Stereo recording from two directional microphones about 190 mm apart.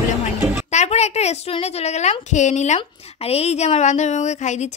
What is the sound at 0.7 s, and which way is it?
A woman's voice, 35° left (ahead or behind).